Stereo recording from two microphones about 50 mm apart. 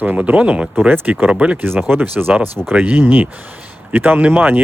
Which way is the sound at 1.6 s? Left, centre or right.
Right.